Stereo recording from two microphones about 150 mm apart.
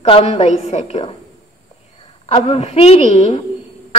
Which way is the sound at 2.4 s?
50° left (ahead or behind).